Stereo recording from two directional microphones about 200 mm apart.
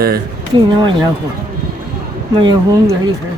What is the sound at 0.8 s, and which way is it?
Speech, 25° right (ahead or behind).